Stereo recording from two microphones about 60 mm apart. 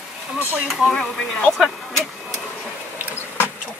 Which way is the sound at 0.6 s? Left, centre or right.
Centre.